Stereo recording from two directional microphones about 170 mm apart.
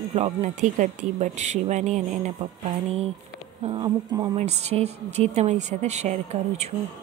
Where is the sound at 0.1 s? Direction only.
40° right (ahead or behind).